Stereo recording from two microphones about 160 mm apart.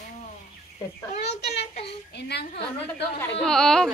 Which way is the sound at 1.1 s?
45° left (ahead or behind).